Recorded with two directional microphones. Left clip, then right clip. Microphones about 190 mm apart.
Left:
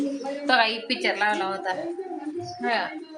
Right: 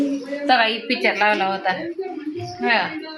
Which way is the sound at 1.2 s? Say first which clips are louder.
Right 6 dB; 25° right (ahead or behind).